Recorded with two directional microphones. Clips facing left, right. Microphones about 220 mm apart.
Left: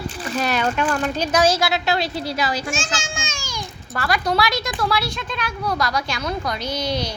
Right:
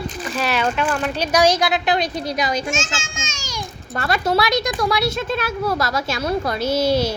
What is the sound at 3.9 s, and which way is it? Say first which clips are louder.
A child's voice: right 2 dB; 25° right (ahead or behind).